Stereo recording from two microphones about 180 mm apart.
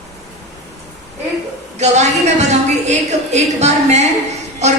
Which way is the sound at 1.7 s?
40° right (ahead or behind).